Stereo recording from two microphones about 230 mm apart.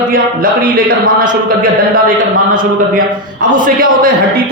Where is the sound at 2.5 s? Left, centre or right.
Right.